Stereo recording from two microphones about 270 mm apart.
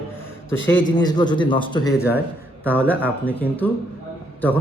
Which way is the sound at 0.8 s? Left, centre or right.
Centre.